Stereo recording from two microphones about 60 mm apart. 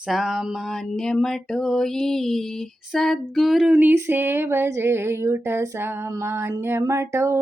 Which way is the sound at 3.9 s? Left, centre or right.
Right.